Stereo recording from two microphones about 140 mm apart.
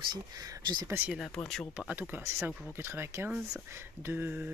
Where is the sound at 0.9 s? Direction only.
10° right (ahead or behind).